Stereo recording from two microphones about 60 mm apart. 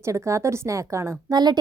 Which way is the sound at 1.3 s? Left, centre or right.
Right.